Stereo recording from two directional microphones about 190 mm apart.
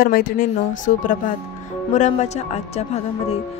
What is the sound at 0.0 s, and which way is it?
Speech, 50° left (ahead or behind).